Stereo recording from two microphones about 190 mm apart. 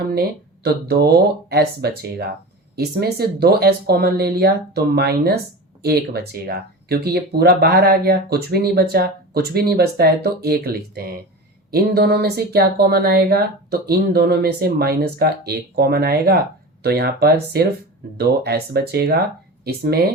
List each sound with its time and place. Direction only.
0.1 s speech: 60° right (ahead or behind)